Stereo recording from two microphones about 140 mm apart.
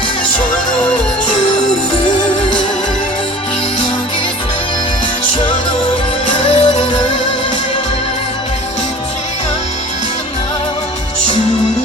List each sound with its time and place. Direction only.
6.3 s music: 35° left (ahead or behind)